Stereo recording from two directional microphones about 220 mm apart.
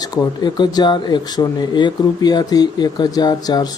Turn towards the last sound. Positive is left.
turn(degrees=20)  # may be behind; listen again after turning